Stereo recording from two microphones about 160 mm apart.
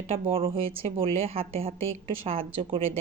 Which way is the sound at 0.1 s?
35° right (ahead or behind).